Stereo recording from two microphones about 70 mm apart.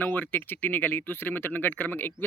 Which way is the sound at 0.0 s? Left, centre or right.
Left.